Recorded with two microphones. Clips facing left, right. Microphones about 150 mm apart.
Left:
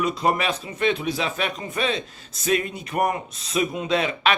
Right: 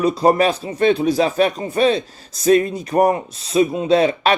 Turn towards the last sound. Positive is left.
turn(degrees=-35)  # may be behind; listen again after turning